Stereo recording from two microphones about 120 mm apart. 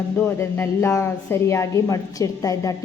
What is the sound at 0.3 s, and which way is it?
A woman's voice, 20° left (ahead or behind).